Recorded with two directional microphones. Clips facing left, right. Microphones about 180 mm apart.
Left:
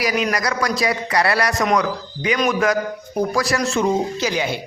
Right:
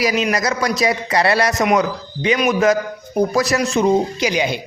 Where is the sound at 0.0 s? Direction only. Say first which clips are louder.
Right 2 dB; 25° right (ahead or behind).